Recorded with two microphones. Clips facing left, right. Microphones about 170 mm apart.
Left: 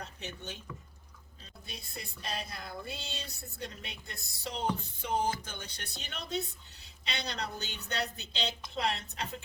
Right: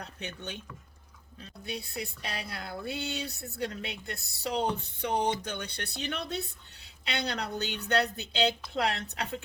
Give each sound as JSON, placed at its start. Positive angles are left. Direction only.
{"t": 0.0, "sound": "speech", "side_deg": -65}